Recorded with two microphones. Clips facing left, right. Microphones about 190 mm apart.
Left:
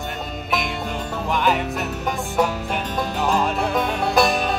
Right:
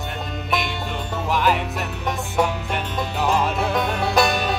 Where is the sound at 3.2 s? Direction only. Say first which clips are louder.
Right 1 dB; centre (ahead or behind).